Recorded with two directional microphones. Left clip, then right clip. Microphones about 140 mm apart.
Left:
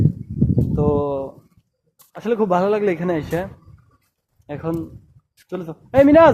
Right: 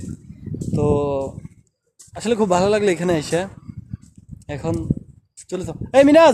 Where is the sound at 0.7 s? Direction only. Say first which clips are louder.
Right 1 dB; 30° right (ahead or behind).